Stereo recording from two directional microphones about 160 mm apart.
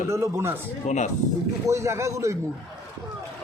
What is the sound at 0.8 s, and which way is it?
Speech, 50° left (ahead or behind).